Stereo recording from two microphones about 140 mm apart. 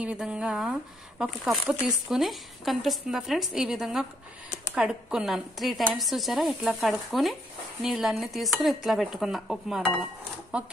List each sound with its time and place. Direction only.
0.0 s speech: 10° right (ahead or behind)